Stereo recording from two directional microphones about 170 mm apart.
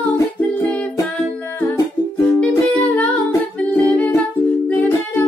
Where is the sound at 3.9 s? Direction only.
10° left (ahead or behind).